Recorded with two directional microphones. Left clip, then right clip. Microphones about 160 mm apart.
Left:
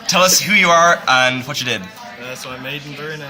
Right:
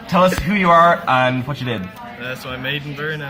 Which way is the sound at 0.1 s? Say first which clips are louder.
Left 3 dB; 15° left (ahead or behind).